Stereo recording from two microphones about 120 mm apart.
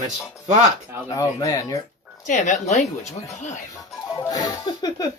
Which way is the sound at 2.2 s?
85° left.